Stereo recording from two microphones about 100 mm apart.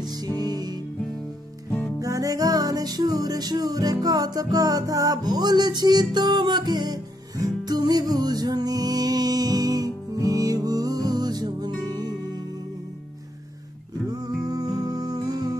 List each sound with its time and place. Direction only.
0.0 s music: 40° right (ahead or behind)
2.0 s music: 35° right (ahead or behind)
14.1 s music: 40° right (ahead or behind)